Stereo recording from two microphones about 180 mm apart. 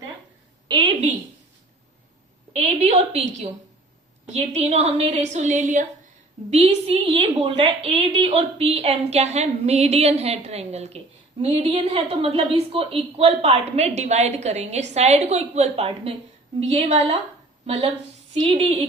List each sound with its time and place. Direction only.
0.7 s a woman's voice: 25° right (ahead or behind)
2.6 s a woman's voice: 35° right (ahead or behind)